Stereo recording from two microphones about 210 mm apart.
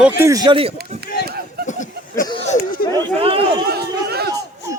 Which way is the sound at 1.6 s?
35° left (ahead or behind).